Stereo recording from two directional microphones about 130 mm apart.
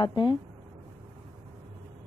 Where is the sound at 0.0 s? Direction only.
35° left (ahead or behind).